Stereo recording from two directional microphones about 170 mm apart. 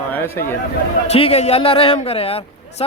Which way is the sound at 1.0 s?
35° left (ahead or behind).